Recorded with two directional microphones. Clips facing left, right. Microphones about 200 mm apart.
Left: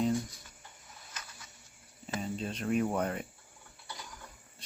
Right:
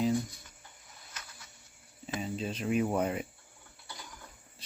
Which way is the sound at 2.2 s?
Centre (ahead or behind).